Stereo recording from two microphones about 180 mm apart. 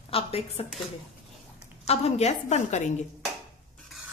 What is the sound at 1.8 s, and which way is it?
A woman's voice, 35° left (ahead or behind).